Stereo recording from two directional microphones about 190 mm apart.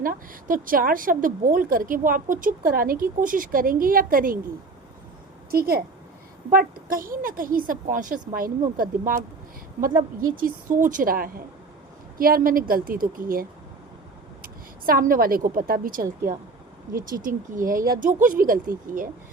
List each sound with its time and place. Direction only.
0.0 s a woman's voice: 45° right (ahead or behind)
5.5 s a woman's voice: 55° right (ahead or behind)
10.3 s a woman's voice: 45° right (ahead or behind)